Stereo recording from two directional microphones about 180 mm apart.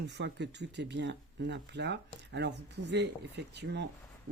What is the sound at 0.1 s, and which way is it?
Speech, 75° right (ahead or behind).